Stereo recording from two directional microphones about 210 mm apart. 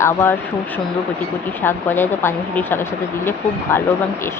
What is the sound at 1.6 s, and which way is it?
Speech, 10° left (ahead or behind).